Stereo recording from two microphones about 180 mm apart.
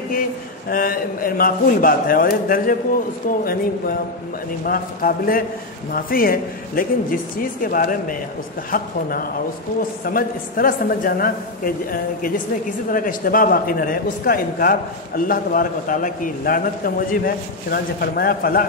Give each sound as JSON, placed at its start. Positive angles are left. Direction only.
{"t": 0.7, "sound": "a man's voice", "side_deg": 55}